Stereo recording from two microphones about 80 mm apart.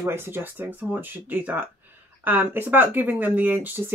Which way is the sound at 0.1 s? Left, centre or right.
Right.